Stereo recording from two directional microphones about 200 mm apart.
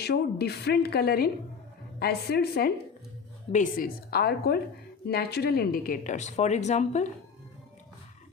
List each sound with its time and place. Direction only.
0.0 s a woman's voice: 55° left (ahead or behind); by 7.1 s 35° left (ahead or behind)